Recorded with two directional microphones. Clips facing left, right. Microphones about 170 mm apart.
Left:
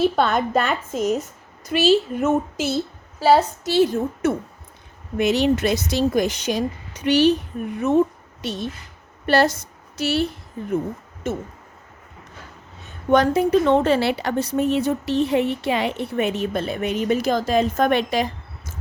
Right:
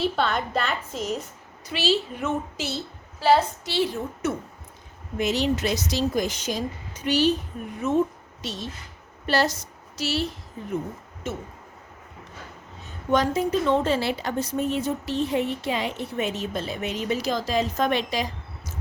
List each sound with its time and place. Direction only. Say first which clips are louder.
0.0 s a woman's voice: left 6 dB; 50° left (ahead or behind)
5.1 s a woman's voice: left 5 dB; 65° left (ahead or behind)
8.4 s a woman's voice: left 6 dB; 55° left (ahead or behind)
13.3 s a woman's voice: left 5 dB; 65° left (ahead or behind)